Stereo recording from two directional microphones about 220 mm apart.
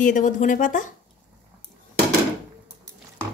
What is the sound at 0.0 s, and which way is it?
Speech, 35° left (ahead or behind).